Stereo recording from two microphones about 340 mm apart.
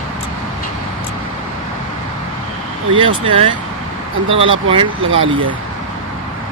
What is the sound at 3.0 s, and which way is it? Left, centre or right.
Speech, centre.